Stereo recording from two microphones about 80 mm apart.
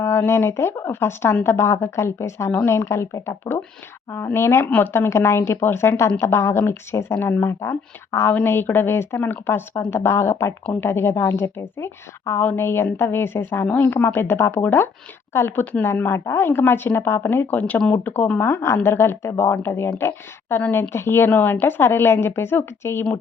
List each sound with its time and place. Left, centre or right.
0.0 s a woman's voice: left
8.3 s a woman's voice: left
20.6 s a woman's voice: left